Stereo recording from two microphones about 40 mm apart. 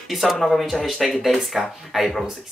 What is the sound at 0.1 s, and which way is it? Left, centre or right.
Speech, centre.